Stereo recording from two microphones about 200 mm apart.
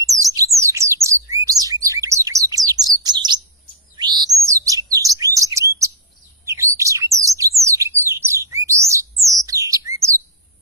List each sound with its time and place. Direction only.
0.0 s bird: 15° right (ahead or behind)
3.9 s chirp: 20° right (ahead or behind)
6.4 s bird: 15° right (ahead or behind)